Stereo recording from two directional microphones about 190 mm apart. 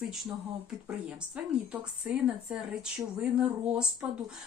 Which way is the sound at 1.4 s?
5° right (ahead or behind).